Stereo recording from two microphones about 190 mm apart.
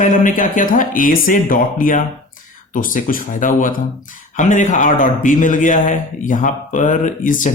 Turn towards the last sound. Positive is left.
turn(degrees=40)  # may be behind; listen again after turning